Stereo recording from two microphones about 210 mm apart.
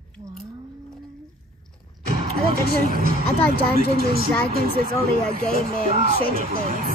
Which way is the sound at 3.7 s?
45° right (ahead or behind).